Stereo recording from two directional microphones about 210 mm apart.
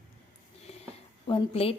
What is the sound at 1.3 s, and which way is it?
Speech, 25° left (ahead or behind).